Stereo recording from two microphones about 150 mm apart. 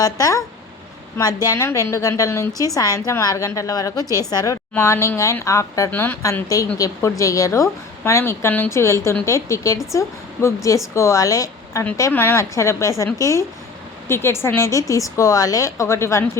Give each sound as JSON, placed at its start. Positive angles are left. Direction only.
{"t": 0.0, "sound": "a woman's voice", "side_deg": 25}